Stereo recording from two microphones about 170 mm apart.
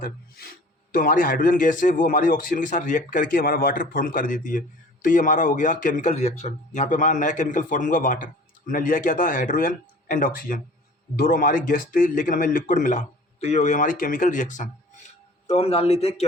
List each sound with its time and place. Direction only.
0.0 s a man's voice: 60° left (ahead or behind); by 16.2 s 35° left (ahead or behind)